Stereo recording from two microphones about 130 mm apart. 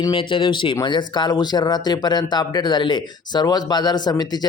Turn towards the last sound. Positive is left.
turn(degrees=30)  # may be behind; listen again after turning